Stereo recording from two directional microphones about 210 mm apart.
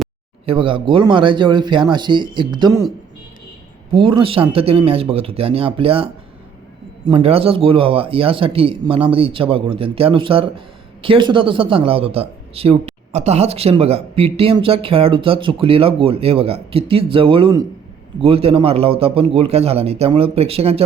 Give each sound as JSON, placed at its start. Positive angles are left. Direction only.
{"t": 0.4, "sound": "speech", "side_deg": -25}
{"t": 3.9, "sound": "speech", "side_deg": -25}